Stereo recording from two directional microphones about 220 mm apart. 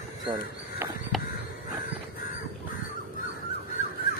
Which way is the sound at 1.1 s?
Centre (ahead or behind).